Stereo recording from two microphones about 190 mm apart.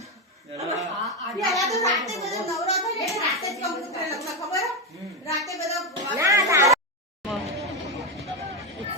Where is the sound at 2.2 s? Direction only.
Centre (ahead or behind).